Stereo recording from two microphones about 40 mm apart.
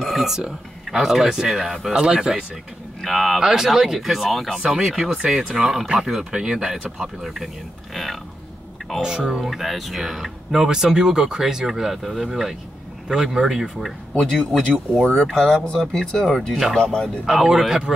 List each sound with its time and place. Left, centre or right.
0.1 s a sound: centre
1.0 s speech: centre
3.1 s speech: centre
3.3 s speech: centre
5.1 s speech: right; by 8.2 s centre
9.0 s speech: centre
9.4 s speech: centre
14.1 s speech: centre
17.3 s speech: centre